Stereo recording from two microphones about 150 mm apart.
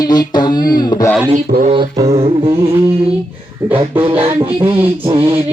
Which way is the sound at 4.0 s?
40° right (ahead or behind).